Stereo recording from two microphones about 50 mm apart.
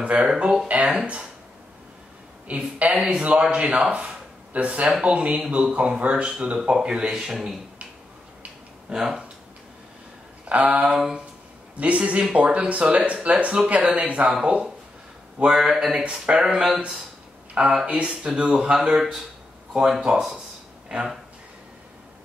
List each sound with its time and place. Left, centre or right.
0.0 s speech: right
2.4 s speech: right; by 7.5 s centre
8.9 s speech: centre
10.4 s a sound: right
10.9 s speech: centre
11.7 s speech: right
15.5 s speech: centre
16.0 s speech: centre